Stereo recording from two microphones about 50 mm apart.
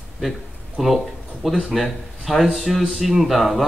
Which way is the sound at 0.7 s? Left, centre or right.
Centre.